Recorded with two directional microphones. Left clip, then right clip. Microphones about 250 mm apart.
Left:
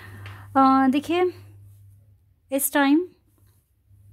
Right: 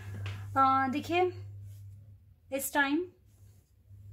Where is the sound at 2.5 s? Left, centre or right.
Left.